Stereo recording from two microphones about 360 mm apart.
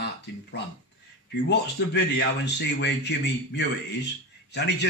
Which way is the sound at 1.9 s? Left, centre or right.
Left.